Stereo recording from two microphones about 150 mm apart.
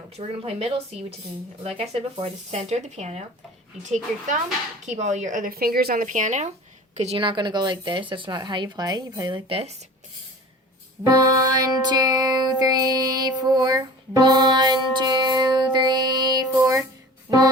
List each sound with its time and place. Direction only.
0.2 s speech: 40° right (ahead or behind)
6.9 s speech: 45° right (ahead or behind)
11.0 s music: 25° right (ahead or behind)